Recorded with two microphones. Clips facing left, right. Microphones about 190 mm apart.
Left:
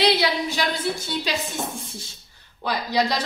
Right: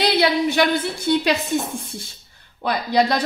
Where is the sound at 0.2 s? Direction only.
60° right (ahead or behind).